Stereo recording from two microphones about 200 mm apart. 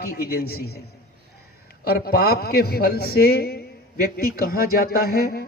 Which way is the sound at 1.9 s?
50° left (ahead or behind).